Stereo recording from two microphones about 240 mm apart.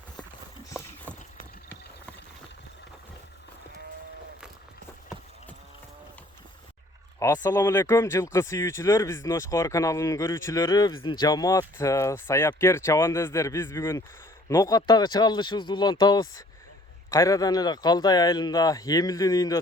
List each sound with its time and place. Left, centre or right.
7.2 s speech: centre